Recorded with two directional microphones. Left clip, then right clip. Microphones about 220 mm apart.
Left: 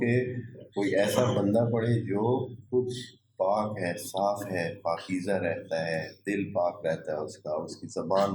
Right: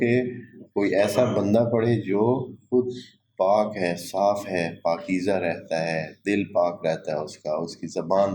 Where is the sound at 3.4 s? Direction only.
35° right (ahead or behind).